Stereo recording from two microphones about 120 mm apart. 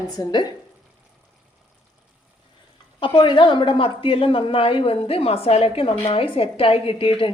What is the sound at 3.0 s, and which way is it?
A woman's voice, 40° left (ahead or behind).